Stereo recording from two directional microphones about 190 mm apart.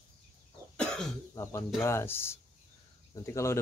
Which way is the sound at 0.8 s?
5° left (ahead or behind).